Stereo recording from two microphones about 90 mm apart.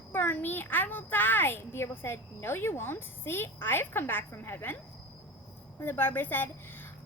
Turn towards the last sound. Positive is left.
turn(degrees=25)  # may be behind; listen again after turning